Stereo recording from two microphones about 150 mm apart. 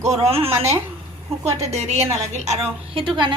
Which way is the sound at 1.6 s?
45° right (ahead or behind).